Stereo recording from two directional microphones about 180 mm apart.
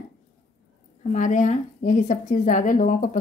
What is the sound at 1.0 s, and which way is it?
A woman's voice, 45° left (ahead or behind).